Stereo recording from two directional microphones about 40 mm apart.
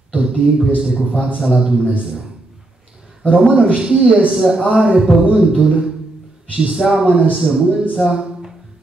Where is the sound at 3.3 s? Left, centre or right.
Right.